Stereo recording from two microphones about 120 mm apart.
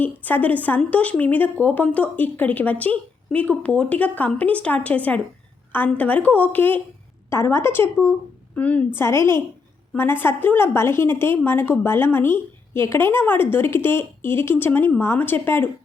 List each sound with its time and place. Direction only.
0.0 s a woman's voice: 15° left (ahead or behind)